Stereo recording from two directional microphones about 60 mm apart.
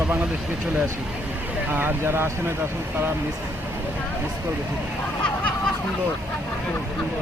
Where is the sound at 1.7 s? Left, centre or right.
Right.